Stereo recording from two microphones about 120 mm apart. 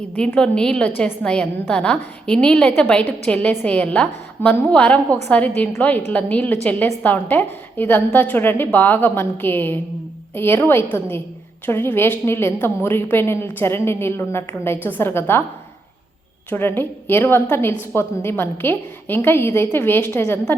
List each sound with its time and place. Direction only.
0.2 s a woman's voice: 5° left (ahead or behind)
16.5 s a woman's voice: 15° left (ahead or behind)